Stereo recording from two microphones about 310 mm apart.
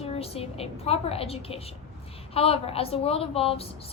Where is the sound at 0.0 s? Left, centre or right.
Centre.